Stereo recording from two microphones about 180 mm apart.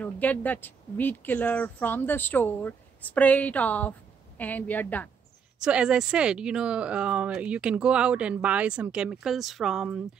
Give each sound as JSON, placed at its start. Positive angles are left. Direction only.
{"t": 0.0, "sound": "speech", "side_deg": 10}
{"t": 5.6, "sound": "speech", "side_deg": -5}